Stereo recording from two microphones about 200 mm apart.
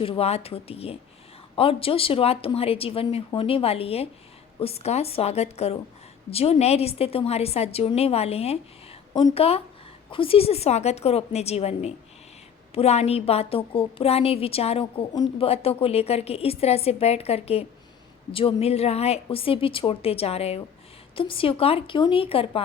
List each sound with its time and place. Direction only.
0.0 s a woman's voice: 30° left (ahead or behind)